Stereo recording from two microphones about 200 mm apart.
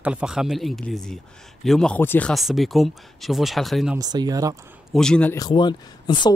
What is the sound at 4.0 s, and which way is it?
Speech, 20° right (ahead or behind).